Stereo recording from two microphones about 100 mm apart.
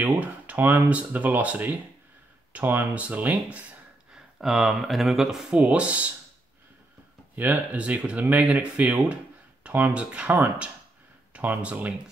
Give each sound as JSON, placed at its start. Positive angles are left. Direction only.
{"t": 0.0, "sound": "speech", "side_deg": -15}
{"t": 7.3, "sound": "speech", "side_deg": -15}